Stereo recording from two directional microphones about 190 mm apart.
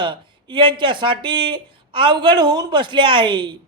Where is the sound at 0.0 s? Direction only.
25° right (ahead or behind).